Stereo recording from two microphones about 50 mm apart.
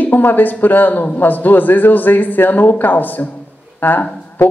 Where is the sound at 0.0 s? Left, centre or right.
Left.